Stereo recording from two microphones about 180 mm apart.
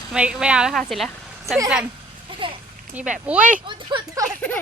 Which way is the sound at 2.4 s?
30° right (ahead or behind).